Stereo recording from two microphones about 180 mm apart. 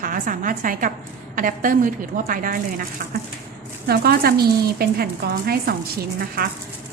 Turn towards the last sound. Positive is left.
turn(degrees=-55)  # may be behind; listen again after turning